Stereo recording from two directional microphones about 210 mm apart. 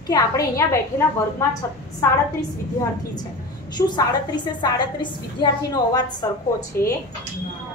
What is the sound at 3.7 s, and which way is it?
A woman's voice, 20° left (ahead or behind).